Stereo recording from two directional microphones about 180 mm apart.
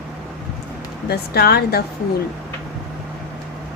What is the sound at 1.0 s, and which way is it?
Speech, 60° left (ahead or behind).